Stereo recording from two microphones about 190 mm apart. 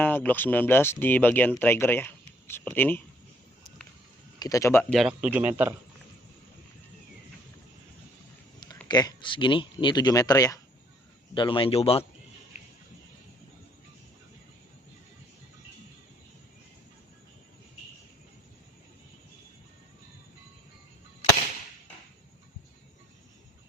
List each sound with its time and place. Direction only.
0.0 s speech: 10° left (ahead or behind)
4.4 s a man's voice: 20° left (ahead or behind); by 5.7 s 10° right (ahead or behind)
8.9 s speech: 20° left (ahead or behind)